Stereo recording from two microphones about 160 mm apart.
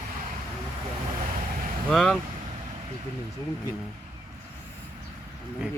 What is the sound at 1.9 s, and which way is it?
Speech, 5° left (ahead or behind).